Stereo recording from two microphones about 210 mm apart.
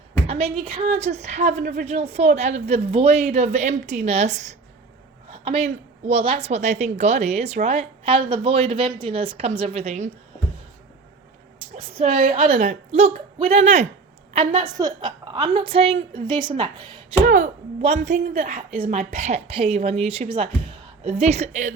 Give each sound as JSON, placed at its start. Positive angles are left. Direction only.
{"t": 0.3, "sound": "a woman's voice", "side_deg": -30}
{"t": 11.9, "sound": "a woman's voice", "side_deg": -30}
{"t": 17.2, "sound": "speech", "side_deg": -40}